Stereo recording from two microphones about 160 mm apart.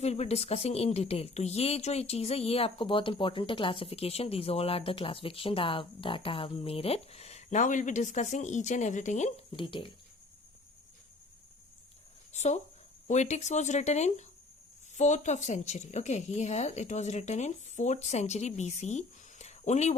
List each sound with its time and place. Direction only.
0.0 s a woman's voice: 40° left (ahead or behind)
9.5 s a woman's voice: 30° left (ahead or behind)
12.3 s a woman's voice: 45° left (ahead or behind)